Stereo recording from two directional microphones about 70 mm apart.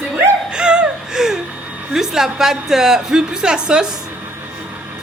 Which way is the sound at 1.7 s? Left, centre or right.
Right.